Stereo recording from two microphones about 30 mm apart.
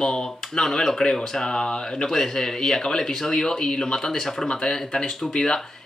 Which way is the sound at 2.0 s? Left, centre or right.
Centre.